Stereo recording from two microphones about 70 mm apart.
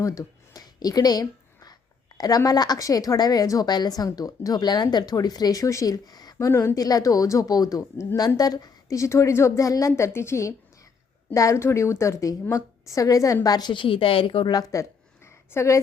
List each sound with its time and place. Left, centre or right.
0.0 s speech: left
0.6 s a sound: left
2.1 s a woman's voice: left
6.4 s a woman's voice: left
6.7 s a woman's voice: left
8.4 s a woman's voice: left
9.0 s speech: left
9.9 s a woman's voice: left
15.5 s speech: left